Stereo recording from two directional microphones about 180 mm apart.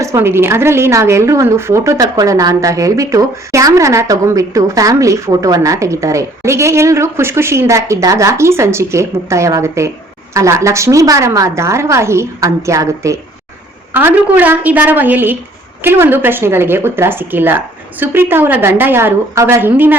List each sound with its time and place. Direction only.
0.0 s a woman's voice: 15° right (ahead or behind)